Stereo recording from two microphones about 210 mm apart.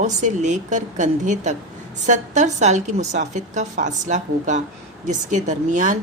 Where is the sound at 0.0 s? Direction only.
35° right (ahead or behind).